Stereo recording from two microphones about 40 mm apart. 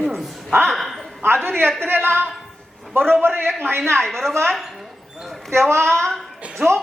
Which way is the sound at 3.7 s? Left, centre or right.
Right.